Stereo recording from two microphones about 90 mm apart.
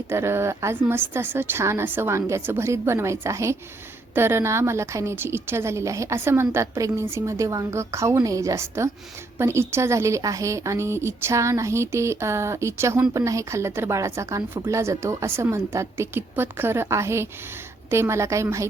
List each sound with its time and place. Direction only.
0.1 s a woman's voice: 30° right (ahead or behind)